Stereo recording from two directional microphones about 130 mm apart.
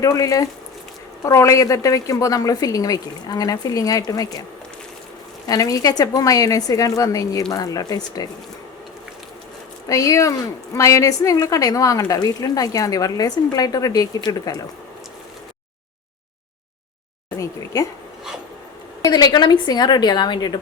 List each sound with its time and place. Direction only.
0.0 s a woman's voice: 25° left (ahead or behind)
5.5 s a woman's voice: 30° left (ahead or behind)
9.9 s a woman's voice: 25° left (ahead or behind)
17.3 s a sound: 25° left (ahead or behind)
19.0 s a woman's voice: 30° left (ahead or behind)